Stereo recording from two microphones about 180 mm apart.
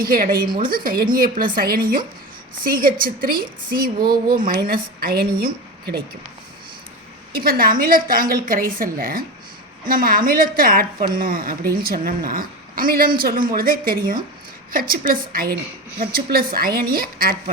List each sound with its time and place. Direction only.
0.0 s a woman's voice: 55° right (ahead or behind)
7.3 s a woman's voice: 55° right (ahead or behind)